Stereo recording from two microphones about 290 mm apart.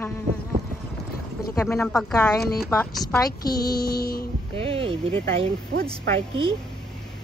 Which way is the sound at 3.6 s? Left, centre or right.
Left.